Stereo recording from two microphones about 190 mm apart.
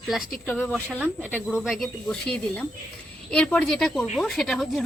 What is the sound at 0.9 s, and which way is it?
Speech, 10° right (ahead or behind).